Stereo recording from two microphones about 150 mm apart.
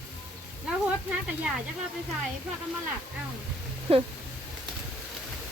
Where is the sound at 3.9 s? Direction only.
40° right (ahead or behind).